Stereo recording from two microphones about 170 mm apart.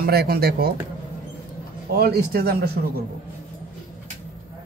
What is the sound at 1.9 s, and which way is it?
Speech, 70° right (ahead or behind).